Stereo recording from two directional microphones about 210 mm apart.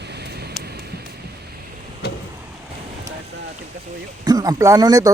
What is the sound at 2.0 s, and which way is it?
Vehicle, 50° left (ahead or behind).